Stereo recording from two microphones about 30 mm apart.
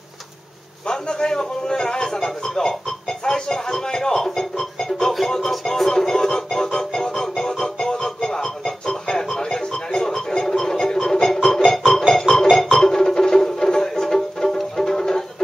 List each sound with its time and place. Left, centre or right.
0.8 s a man's voice: left
1.7 s a sound: left
2.0 s music: centre